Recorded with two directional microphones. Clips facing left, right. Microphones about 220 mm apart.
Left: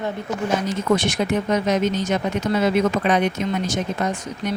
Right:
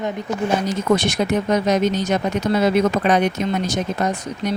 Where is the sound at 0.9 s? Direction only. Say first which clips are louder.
Right 2 dB; 40° right (ahead or behind).